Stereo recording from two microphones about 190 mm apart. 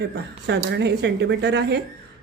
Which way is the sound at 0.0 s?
65° right (ahead or behind).